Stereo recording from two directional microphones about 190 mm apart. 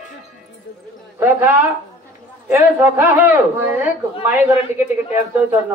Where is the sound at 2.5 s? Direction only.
10° right (ahead or behind).